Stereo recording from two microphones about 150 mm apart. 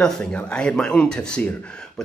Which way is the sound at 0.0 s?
5° left (ahead or behind).